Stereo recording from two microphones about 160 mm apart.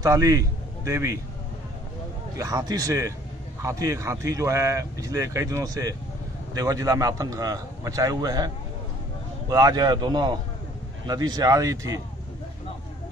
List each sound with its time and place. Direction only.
0.0 s a man's voice: 20° right (ahead or behind)
2.3 s speech: 25° right (ahead or behind)
9.5 s speech: 25° right (ahead or behind)